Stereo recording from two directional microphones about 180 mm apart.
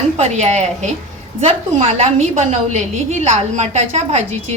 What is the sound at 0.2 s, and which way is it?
A woman's voice, 40° right (ahead or behind).